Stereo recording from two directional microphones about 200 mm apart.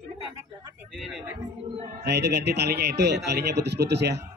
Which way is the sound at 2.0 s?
55° right (ahead or behind).